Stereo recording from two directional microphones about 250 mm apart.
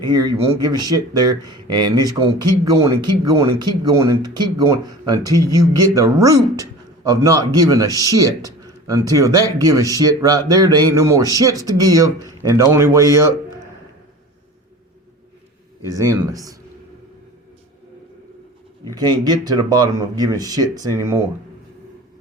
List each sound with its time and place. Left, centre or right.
0.0 s speech: centre
15.8 s speech: centre
18.9 s speech: centre